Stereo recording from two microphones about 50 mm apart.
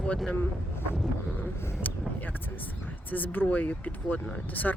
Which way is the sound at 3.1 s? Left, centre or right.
Left.